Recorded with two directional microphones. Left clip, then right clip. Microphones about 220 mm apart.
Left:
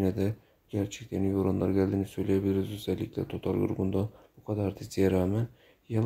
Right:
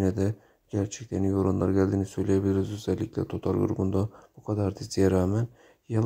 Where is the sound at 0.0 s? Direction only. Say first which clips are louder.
Right 2 dB; 20° right (ahead or behind).